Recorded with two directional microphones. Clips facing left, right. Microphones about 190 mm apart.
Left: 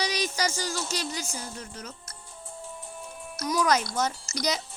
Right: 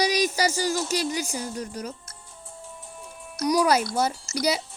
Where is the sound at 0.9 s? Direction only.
15° right (ahead or behind).